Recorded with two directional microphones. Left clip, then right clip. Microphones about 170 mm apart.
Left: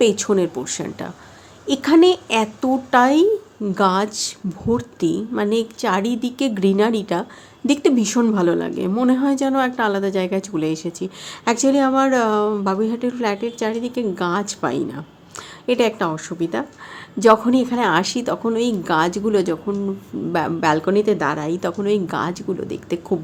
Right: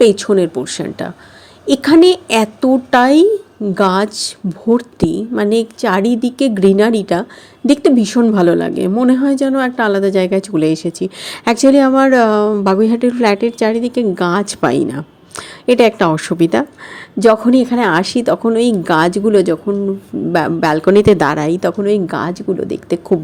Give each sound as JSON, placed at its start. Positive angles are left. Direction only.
{"t": 0.0, "sound": "a woman's voice", "side_deg": -20}
{"t": 17.2, "sound": "a woman's voice", "side_deg": -25}